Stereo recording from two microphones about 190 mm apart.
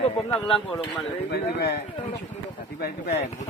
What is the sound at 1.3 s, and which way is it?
Speech, 60° left (ahead or behind).